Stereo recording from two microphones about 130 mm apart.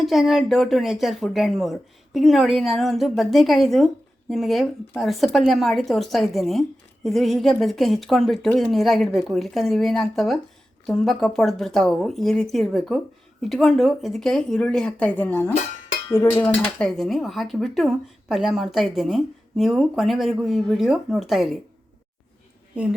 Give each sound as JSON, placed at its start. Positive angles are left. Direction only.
{"t": 0.0, "sound": "speech", "side_deg": 0}
{"t": 16.0, "sound": "dishes", "side_deg": 15}
{"t": 16.3, "sound": "speech", "side_deg": 10}
{"t": 22.7, "sound": "a woman's voice", "side_deg": -10}